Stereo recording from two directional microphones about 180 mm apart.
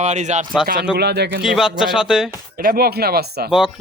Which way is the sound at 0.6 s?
60° right (ahead or behind).